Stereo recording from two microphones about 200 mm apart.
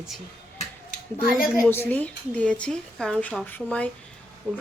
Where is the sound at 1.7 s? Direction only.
10° left (ahead or behind).